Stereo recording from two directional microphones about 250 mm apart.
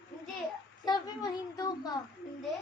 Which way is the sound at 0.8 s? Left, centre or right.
Centre.